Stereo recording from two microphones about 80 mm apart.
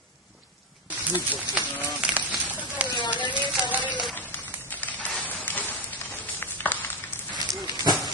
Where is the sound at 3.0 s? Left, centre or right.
Left.